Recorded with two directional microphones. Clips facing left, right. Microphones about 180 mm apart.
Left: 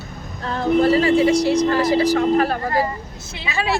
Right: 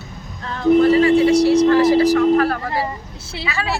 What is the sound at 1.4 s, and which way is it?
Speech, 15° left (ahead or behind).